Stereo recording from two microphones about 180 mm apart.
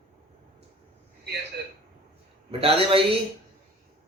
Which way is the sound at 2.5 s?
30° right (ahead or behind).